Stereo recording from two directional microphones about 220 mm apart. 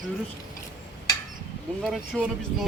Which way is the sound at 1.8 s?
Centre (ahead or behind).